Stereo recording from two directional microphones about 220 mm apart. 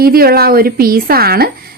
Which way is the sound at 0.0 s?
45° right (ahead or behind).